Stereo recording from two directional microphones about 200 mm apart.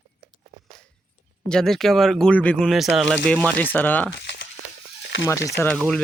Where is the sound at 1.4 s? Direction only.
5° left (ahead or behind).